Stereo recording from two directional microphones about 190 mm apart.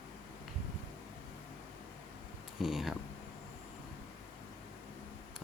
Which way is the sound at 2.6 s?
Centre (ahead or behind).